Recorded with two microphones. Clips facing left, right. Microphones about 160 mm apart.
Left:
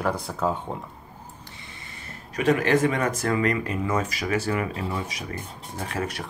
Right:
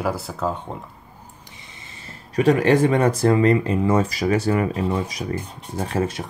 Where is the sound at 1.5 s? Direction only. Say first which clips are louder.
Left 1 dB; 20° right (ahead or behind).